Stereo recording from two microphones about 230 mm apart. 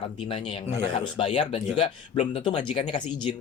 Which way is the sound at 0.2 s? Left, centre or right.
Left.